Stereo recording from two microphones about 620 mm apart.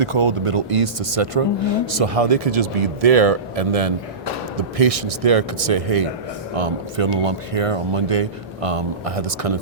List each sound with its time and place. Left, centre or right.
0.0 s speech: right